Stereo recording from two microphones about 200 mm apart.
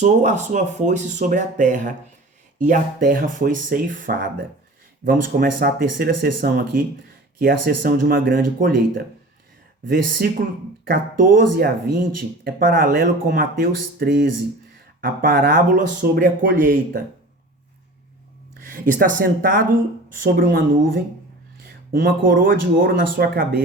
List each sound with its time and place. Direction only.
0.0 s speech: 35° right (ahead or behind)
14.1 s speech: 65° right (ahead or behind)
15.0 s speech: 45° right (ahead or behind)
18.9 s speech: 45° right (ahead or behind)
20.2 s speech: 60° right (ahead or behind)
20.6 s speech: 45° right (ahead or behind)
22.0 s speech: 45° right (ahead or behind)